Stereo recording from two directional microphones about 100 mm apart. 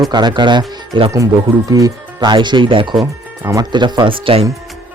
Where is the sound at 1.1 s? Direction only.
30° right (ahead or behind); by 2.9 s 55° right (ahead or behind).